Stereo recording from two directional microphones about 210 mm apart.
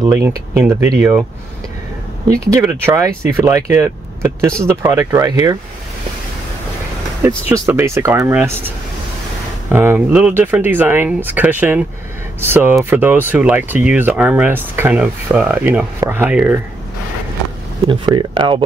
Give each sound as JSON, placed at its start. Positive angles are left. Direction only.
{"t": 0.0, "sound": "speech", "side_deg": -15}
{"t": 2.5, "sound": "speech", "side_deg": -10}
{"t": 7.2, "sound": "speech", "side_deg": -15}
{"t": 17.8, "sound": "speech", "side_deg": -20}